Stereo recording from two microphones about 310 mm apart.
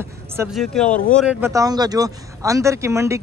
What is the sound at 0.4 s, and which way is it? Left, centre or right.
Speech, centre.